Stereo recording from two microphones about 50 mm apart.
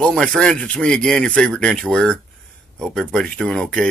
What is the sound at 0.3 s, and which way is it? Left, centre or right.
Speech, centre.